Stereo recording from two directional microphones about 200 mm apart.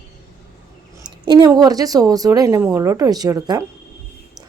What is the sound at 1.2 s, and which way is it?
Speech, 20° right (ahead or behind).